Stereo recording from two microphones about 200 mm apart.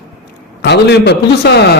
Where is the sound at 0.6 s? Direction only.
60° left (ahead or behind).